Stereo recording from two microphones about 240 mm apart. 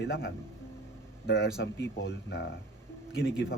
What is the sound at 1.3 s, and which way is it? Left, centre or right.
A man's voice, left.